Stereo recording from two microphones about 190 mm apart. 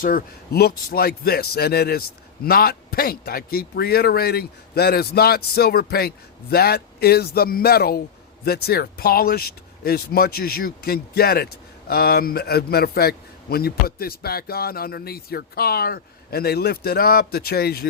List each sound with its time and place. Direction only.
0.0 s a man's voice: 50° left (ahead or behind)